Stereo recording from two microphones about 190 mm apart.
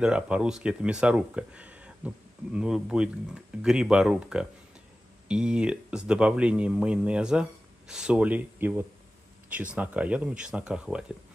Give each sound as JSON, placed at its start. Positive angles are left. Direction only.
{"t": 0.0, "sound": "speech", "side_deg": -5}